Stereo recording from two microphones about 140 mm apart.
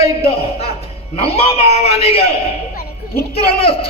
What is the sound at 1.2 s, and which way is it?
A man's voice, 45° left (ahead or behind).